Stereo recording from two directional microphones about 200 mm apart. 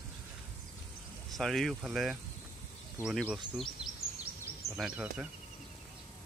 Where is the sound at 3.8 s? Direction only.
5° right (ahead or behind).